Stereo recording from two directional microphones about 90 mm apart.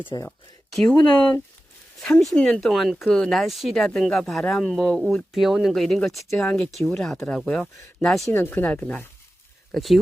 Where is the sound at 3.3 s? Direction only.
Centre (ahead or behind).